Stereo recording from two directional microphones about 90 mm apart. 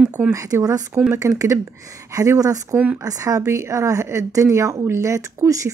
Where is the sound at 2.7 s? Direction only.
20° right (ahead or behind).